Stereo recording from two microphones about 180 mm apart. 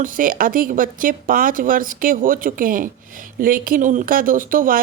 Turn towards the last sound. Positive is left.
turn(degrees=-50)  # may be behind; listen again after turning